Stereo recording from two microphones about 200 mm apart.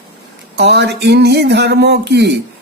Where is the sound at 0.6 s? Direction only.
55° right (ahead or behind).